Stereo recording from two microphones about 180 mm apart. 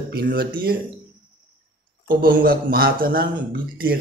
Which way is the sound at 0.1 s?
55° right (ahead or behind).